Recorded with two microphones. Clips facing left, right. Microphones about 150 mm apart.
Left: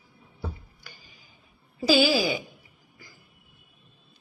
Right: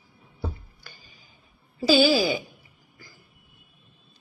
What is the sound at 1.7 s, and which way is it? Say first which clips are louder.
Speech: right 2 dB; 15° left (ahead or behind).